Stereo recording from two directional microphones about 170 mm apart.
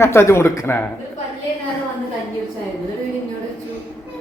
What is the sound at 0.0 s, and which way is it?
Speech, 15° left (ahead or behind).